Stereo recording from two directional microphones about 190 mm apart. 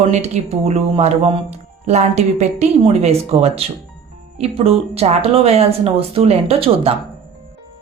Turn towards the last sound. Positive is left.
turn(degrees=-30)  # may be behind; listen again after turning